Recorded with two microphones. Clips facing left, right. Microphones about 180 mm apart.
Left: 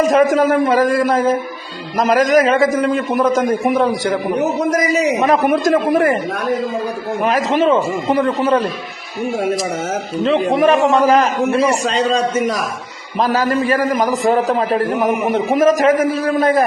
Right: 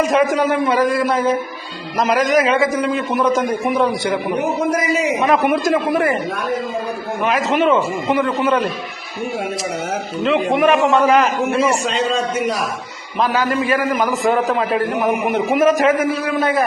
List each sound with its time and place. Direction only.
0.0 s a man's voice: 45° left (ahead or behind)
7.2 s a man's voice: 40° left (ahead or behind)
10.2 s a man's voice: 35° left (ahead or behind)